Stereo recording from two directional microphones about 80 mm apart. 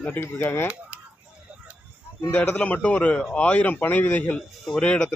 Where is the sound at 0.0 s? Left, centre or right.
Left.